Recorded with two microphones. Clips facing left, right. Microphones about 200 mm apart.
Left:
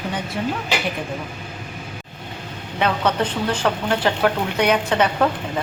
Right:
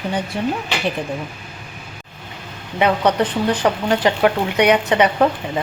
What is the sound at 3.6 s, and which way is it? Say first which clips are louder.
A woman's voice: right 2 dB; 15° right (ahead or behind).